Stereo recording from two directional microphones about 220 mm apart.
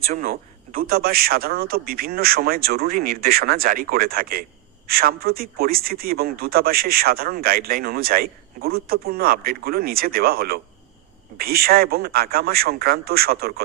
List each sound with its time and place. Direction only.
0.1 s speech: 40° right (ahead or behind)